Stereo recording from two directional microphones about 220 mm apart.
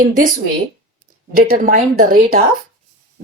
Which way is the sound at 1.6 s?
35° right (ahead or behind).